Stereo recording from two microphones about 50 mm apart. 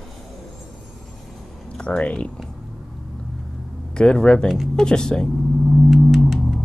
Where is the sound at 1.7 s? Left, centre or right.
Centre.